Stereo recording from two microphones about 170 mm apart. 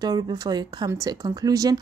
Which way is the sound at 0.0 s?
25° right (ahead or behind).